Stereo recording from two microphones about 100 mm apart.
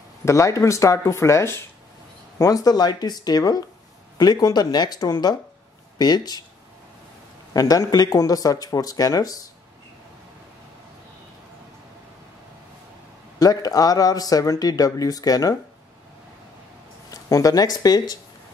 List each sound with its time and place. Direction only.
0.2 s speech: 30° left (ahead or behind)
7.5 s speech: 40° left (ahead or behind)
13.4 s speech: 40° left (ahead or behind)
17.1 s speech: 35° left (ahead or behind)